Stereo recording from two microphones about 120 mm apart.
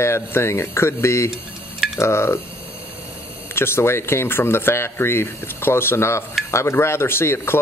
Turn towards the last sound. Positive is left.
turn(degrees=20)  # may be behind; listen again after turning